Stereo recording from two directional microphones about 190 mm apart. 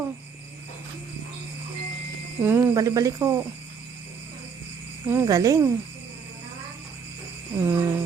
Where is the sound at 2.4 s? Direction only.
15° right (ahead or behind).